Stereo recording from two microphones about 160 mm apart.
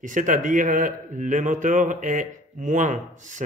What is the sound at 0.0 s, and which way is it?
A man's voice, 50° right (ahead or behind).